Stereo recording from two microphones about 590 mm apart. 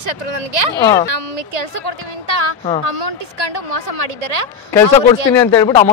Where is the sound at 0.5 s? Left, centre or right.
Right.